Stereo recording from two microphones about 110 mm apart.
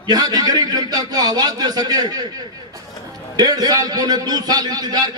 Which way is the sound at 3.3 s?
35° right (ahead or behind).